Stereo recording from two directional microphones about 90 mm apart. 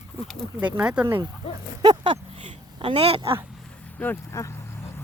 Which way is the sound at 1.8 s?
60° right (ahead or behind).